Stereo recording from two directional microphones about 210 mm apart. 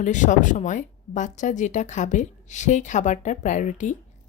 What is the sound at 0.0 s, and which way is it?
Speech, 35° left (ahead or behind).